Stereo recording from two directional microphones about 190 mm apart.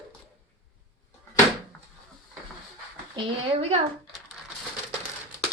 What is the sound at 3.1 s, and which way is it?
Speech, 30° right (ahead or behind).